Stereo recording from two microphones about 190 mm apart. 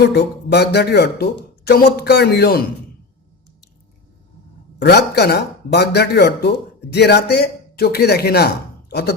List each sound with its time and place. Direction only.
0.1 s speech: 60° left (ahead or behind)
4.8 s speech: 60° left (ahead or behind)